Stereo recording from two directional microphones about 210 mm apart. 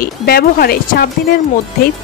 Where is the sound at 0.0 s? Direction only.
45° left (ahead or behind).